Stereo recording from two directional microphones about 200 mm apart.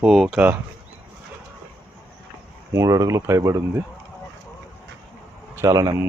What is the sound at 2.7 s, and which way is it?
Speech, 15° right (ahead or behind).